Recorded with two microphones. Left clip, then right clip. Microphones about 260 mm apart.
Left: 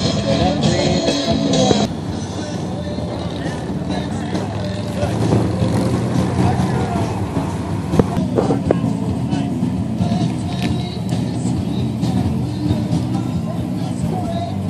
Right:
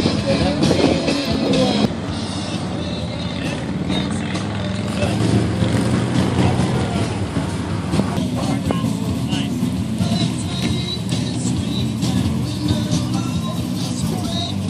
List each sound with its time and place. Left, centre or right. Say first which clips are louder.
0.6 s music: right 1 dB; right